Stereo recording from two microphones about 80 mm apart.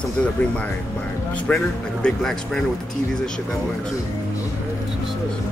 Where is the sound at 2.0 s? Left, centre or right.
Centre.